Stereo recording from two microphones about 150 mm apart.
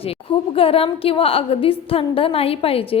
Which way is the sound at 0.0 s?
40° left (ahead or behind).